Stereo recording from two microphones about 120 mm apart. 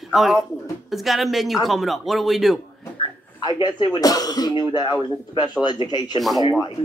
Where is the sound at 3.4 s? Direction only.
35° left (ahead or behind).